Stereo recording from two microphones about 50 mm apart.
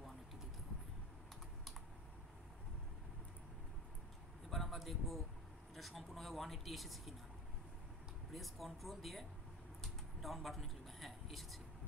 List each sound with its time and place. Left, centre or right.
4.5 s vehicle: centre
5.8 s speech: centre
8.3 s speech: centre
10.2 s speech: centre